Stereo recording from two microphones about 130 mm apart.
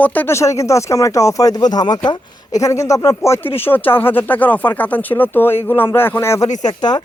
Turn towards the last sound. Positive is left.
turn(degrees=30)  # may be behind; listen again after turning